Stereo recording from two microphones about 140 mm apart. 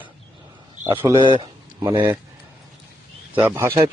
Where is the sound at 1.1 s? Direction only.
35° right (ahead or behind).